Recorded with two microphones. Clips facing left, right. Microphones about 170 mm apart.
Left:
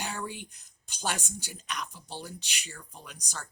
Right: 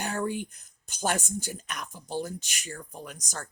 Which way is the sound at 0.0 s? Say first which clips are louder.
Right 7 dB; 50° right (ahead or behind).